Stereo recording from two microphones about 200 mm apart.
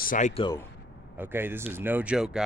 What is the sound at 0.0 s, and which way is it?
Speech, 40° left (ahead or behind).